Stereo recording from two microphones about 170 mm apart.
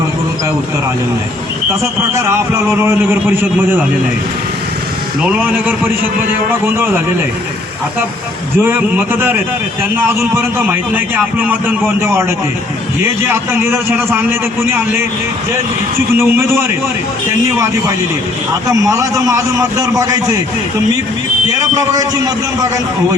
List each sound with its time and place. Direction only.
2.1 s a man's voice: 15° right (ahead or behind)
5.2 s a man's voice: 10° right (ahead or behind)
8.5 s a man's voice: 10° right (ahead or behind)
16.1 s a man's voice: 15° right (ahead or behind)
18.7 s a man's voice: 20° right (ahead or behind)
21.8 s a man's voice: 20° right (ahead or behind)